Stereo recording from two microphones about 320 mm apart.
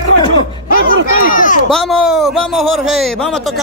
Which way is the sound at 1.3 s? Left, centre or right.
Left.